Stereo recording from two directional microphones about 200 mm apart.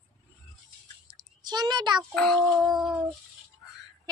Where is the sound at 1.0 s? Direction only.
20° right (ahead or behind).